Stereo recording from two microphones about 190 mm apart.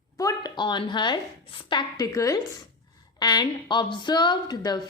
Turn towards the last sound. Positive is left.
turn(degrees=20)  # may be behind; listen again after turning